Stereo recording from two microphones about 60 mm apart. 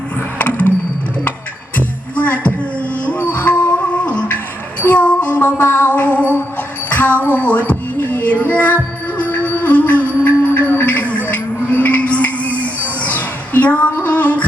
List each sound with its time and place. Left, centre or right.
1.7 s music: left
13.0 s a sound: left
13.9 s music: left